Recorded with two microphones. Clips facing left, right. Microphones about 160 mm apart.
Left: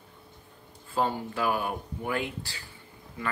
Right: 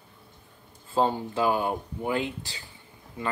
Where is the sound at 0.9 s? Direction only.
25° right (ahead or behind).